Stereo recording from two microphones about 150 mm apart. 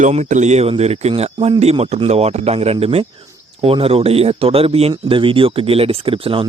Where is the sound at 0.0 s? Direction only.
50° right (ahead or behind).